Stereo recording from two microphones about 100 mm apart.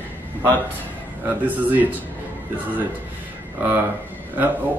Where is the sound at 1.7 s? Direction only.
15° right (ahead or behind).